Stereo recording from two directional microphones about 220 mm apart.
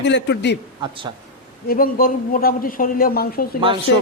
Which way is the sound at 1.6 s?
40° left (ahead or behind).